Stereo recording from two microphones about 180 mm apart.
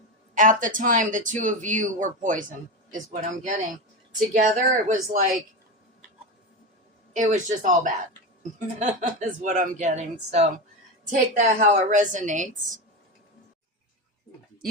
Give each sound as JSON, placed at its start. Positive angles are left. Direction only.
{"t": 0.3, "sound": "speech", "side_deg": -45}
{"t": 7.2, "sound": "speech", "side_deg": -45}